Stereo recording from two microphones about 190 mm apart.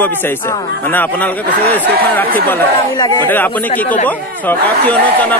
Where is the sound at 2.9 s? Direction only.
20° left (ahead or behind).